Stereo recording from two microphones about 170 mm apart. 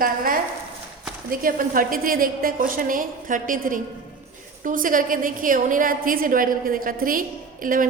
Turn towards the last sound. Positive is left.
turn(degrees=-55)  # may be behind; listen again after turning